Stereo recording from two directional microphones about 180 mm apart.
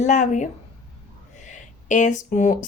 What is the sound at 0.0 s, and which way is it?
Speech, 40° left (ahead or behind).